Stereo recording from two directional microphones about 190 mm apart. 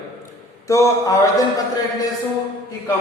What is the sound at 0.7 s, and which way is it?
Speech, 15° left (ahead or behind).